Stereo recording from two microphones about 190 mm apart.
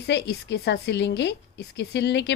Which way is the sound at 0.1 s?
65° left (ahead or behind).